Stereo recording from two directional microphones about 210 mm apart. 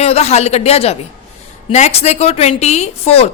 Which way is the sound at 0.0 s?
30° left (ahead or behind).